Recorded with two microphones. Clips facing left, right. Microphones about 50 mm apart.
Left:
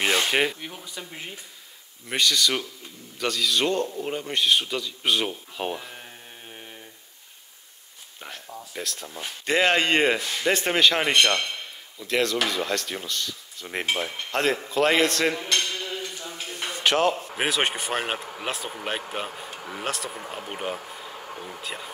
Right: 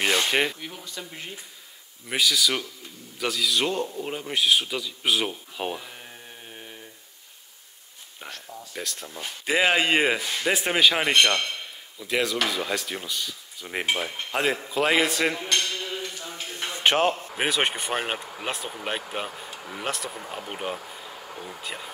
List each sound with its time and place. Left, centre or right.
0.0 s speech: centre
2.0 s a man's voice: centre
8.3 s speech: centre
8.7 s speech: centre
16.6 s a sound: right
17.4 s speech: centre
19.2 s speech: centre
19.8 s speech: centre
21.3 s speech: left
21.6 s speech: centre